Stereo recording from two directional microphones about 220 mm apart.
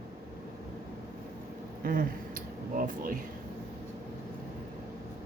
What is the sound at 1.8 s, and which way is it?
Speech, 40° right (ahead or behind).